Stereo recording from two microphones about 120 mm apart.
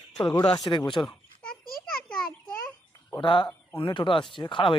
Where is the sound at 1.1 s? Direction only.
5° left (ahead or behind).